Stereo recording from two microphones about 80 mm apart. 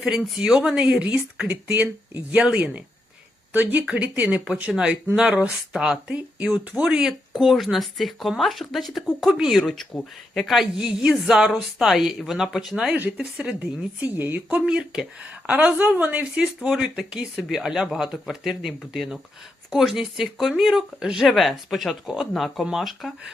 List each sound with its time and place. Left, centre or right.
0.0 s a woman's voice: centre; by 14.6 s right
14.6 s speech: centre
15.2 s a woman's voice: centre
16.6 s speech: centre